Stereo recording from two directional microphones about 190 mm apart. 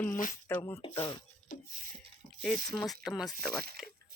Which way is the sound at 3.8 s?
5° right (ahead or behind).